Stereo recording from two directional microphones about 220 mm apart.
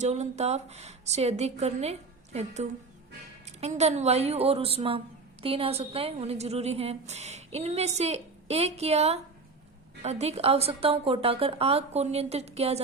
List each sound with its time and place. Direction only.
0.0 s a woman's voice: 30° right (ahead or behind)